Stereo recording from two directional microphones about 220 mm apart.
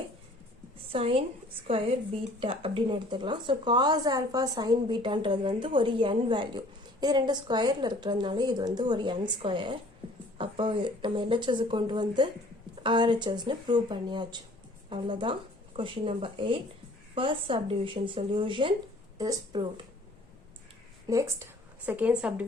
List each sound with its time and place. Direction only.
0.9 s a woman's voice: 25° right (ahead or behind)
21.1 s speech: 15° right (ahead or behind)